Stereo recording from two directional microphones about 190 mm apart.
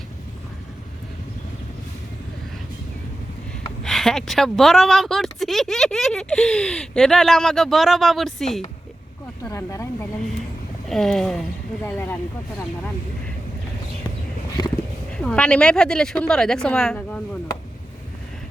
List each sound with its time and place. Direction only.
3.8 s speech: centre (ahead or behind)
9.4 s speech: 15° left (ahead or behind)
10.8 s speech: centre (ahead or behind)
15.1 s speech: 5° left (ahead or behind)